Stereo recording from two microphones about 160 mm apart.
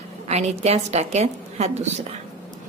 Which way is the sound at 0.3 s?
40° right (ahead or behind).